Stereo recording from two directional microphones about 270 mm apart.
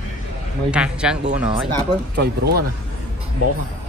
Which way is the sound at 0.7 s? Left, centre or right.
Centre.